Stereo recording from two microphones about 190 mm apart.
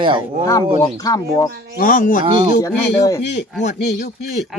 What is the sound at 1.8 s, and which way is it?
Speech, 45° left (ahead or behind).